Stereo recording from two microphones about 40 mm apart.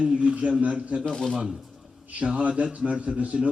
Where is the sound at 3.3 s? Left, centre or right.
Centre.